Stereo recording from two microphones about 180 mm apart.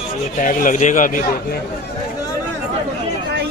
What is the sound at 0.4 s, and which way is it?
A man's voice, 50° left (ahead or behind).